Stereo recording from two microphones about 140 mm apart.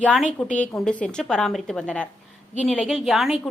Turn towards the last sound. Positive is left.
turn(degrees=0)  # may be behind; listen again after turning